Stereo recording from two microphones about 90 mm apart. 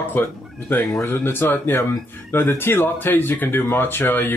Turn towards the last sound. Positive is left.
turn(degrees=20)  # may be behind; listen again after turning